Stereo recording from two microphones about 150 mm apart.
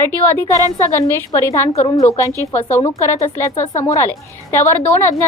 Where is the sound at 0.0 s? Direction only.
15° left (ahead or behind).